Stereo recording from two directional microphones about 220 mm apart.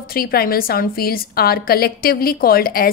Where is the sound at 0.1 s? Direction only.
45° left (ahead or behind).